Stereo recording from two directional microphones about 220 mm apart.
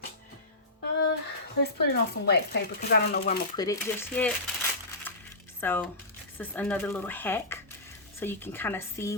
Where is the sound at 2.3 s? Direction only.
45° left (ahead or behind).